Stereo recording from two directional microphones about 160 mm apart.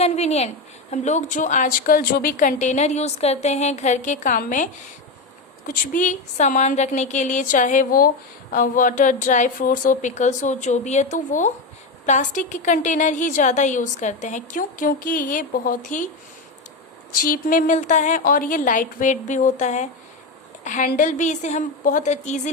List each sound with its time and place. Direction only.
0.0 s a woman's voice: 40° left (ahead or behind)
17.2 s a woman's voice: 65° left (ahead or behind); by 22.4 s 50° left (ahead or behind)